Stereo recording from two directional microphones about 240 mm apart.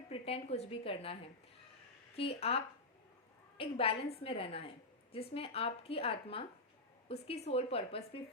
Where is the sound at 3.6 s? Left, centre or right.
Left.